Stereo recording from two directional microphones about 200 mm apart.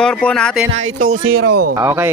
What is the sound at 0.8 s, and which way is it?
Speech, 90° right.